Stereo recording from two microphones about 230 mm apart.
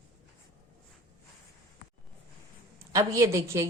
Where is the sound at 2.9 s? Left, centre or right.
Centre.